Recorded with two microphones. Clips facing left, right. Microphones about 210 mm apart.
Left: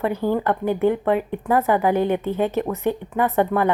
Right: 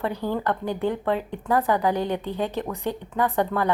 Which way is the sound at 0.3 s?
15° left (ahead or behind).